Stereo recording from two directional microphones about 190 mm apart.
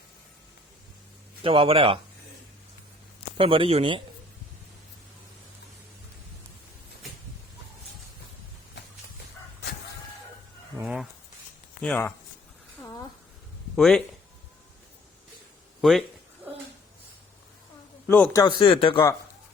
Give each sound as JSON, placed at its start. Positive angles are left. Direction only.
{"t": 1.5, "sound": "speech", "side_deg": -30}
{"t": 3.3, "sound": "speech", "side_deg": -30}
{"t": 10.8, "sound": "speech", "side_deg": 0}
{"t": 13.7, "sound": "speech", "side_deg": 0}
{"t": 15.8, "sound": "speech", "side_deg": 0}
{"t": 16.4, "sound": "a sound", "side_deg": -10}
{"t": 18.1, "sound": "speech", "side_deg": 10}
{"t": 18.4, "sound": "speech", "side_deg": 25}